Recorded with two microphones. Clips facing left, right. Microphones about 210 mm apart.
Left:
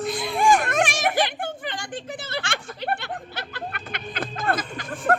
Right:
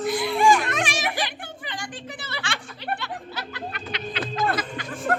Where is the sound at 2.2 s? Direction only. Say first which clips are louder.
Left 3 dB; 45° left (ahead or behind).